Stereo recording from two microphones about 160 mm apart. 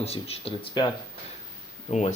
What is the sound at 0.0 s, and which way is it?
Speech, 40° left (ahead or behind).